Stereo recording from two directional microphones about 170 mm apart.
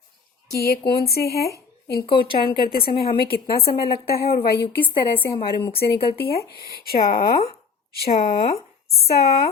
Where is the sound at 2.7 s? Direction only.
65° left (ahead or behind).